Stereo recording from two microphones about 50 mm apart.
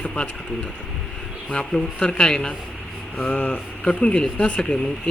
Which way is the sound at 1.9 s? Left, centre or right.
Centre.